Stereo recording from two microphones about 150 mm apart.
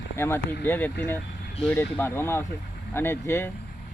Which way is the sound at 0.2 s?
15° left (ahead or behind).